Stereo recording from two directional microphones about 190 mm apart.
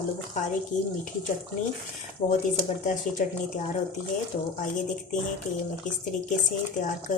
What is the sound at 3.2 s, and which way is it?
Speech, 45° left (ahead or behind).